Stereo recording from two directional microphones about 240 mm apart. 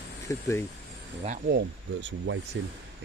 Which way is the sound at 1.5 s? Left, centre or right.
Right.